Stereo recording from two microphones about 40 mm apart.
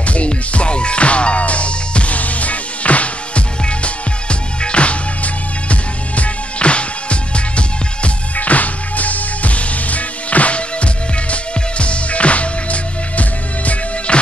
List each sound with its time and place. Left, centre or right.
0.0 s music: left
8.4 s music: left